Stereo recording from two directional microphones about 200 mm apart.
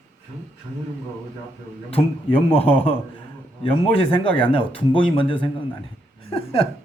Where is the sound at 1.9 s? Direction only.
30° left (ahead or behind).